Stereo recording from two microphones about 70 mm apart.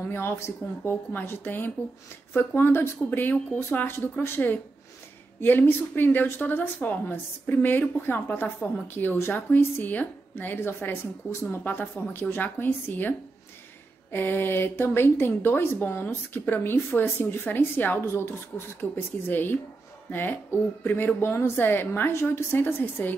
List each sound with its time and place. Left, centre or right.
0.1 s a woman's voice: left
14.1 s a woman's voice: left